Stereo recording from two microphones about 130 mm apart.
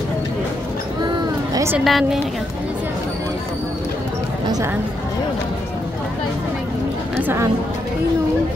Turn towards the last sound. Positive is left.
turn(degrees=-15)  # may be behind; listen again after turning